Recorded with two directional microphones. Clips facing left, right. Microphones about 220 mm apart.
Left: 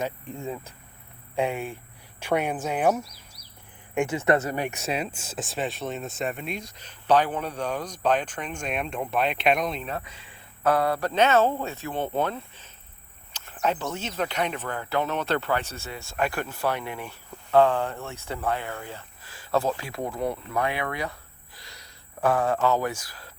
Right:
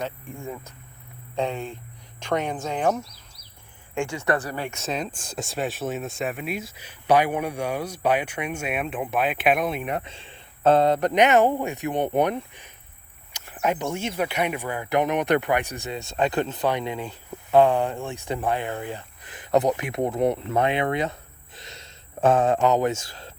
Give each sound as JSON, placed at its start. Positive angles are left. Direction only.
{"t": 0.0, "sound": "speech", "side_deg": 20}
{"t": 10.0, "sound": "speech", "side_deg": -25}